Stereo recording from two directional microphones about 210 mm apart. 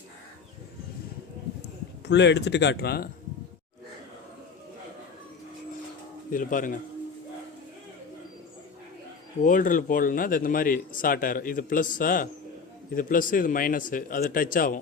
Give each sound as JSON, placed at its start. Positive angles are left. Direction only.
{"t": 2.0, "sound": "speech", "side_deg": 55}
{"t": 6.3, "sound": "speech", "side_deg": 40}
{"t": 9.4, "sound": "speech", "side_deg": 40}